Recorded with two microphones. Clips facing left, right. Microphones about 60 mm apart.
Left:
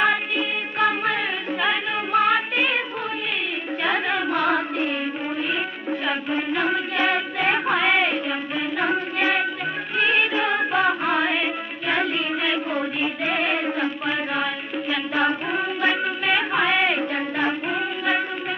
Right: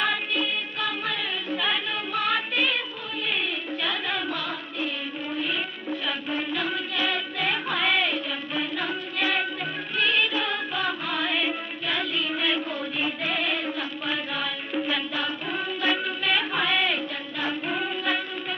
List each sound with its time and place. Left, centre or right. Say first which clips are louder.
0.0 s music: left 5 dB; left
3.8 s music: left 7 dB; left
5.4 s music: left 4 dB; left
9.9 s music: left 3 dB; left